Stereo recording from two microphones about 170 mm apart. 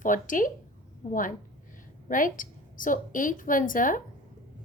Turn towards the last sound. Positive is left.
turn(degrees=50)  # may be behind; listen again after turning